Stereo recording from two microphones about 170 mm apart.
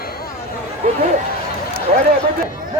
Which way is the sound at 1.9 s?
40° right (ahead or behind).